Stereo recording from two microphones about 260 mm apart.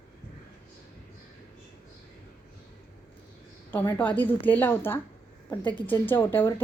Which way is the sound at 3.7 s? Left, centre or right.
Centre.